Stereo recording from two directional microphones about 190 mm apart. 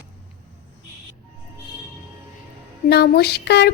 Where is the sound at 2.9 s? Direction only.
60° left (ahead or behind).